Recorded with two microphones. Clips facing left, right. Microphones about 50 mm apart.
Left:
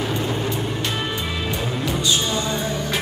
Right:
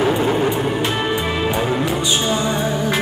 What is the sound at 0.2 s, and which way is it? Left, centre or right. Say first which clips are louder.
Music: right 7 dB; right.